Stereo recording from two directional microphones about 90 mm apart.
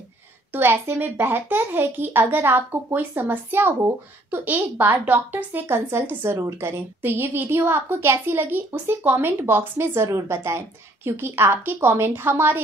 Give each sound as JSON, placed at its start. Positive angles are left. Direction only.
{"t": 0.5, "sound": "a woman's voice", "side_deg": -25}